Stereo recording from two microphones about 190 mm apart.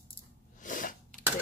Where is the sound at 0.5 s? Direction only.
45° left (ahead or behind).